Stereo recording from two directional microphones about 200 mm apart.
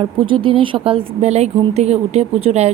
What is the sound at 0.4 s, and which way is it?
A woman's voice, 25° right (ahead or behind).